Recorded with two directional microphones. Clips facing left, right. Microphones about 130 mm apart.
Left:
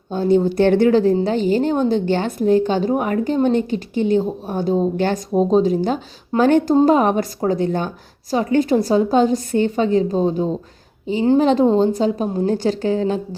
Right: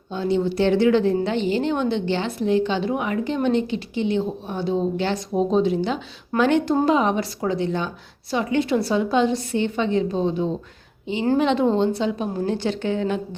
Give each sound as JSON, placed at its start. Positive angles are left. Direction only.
{"t": 0.1, "sound": "a woman's voice", "side_deg": 45}